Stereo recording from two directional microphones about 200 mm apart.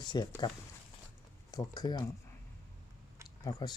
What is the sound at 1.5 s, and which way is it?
Speech, 20° left (ahead or behind).